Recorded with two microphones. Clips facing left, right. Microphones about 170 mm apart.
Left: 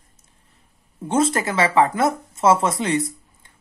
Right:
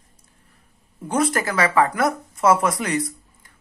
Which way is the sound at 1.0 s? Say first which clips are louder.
Left 2 dB; 25° left (ahead or behind).